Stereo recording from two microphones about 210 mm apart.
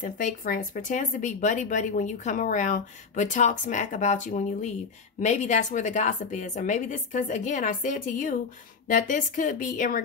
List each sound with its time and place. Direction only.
0.0 s speech: 40° left (ahead or behind)